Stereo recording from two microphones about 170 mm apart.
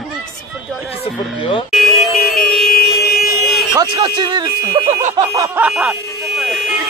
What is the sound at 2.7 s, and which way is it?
Emergency vehicle, 65° left (ahead or behind).